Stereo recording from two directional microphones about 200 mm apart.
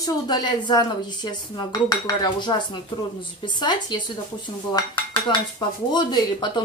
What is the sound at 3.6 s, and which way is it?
Dishes, 20° left (ahead or behind).